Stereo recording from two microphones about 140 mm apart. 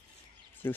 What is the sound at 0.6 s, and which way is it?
Speech, 15° left (ahead or behind).